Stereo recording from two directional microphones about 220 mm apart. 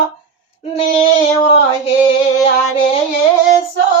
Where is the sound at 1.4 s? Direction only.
25° left (ahead or behind).